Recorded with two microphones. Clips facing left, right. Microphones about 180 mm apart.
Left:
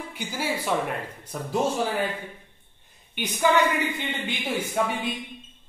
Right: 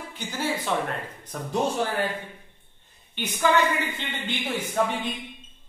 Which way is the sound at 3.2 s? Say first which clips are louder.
Left 1 dB; 10° left (ahead or behind).